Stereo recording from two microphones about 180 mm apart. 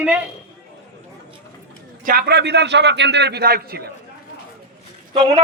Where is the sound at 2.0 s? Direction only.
55° right (ahead or behind).